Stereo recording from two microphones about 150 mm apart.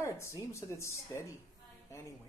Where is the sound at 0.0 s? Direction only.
20° left (ahead or behind).